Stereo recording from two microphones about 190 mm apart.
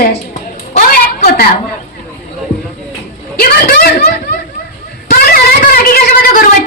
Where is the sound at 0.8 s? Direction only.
45° left (ahead or behind).